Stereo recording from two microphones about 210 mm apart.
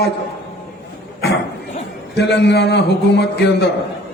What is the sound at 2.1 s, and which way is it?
A man's voice, 50° left (ahead or behind).